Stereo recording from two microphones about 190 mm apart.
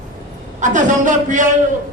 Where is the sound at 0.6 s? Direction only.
40° right (ahead or behind).